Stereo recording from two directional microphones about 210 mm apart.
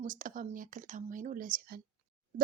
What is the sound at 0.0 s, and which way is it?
Speech, 40° right (ahead or behind).